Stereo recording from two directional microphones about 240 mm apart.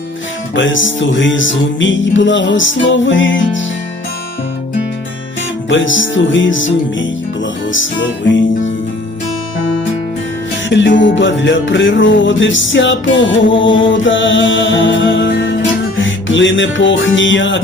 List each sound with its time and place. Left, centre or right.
0.5 s music: left
5.6 s music: left
7.7 s music: left
10.7 s music: left